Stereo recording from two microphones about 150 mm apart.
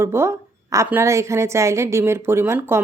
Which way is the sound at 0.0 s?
15° right (ahead or behind).